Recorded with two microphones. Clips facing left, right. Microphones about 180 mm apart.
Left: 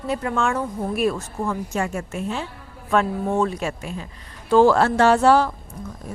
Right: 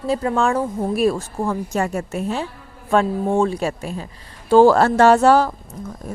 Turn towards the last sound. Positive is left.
turn(degrees=-40)  # may be behind; listen again after turning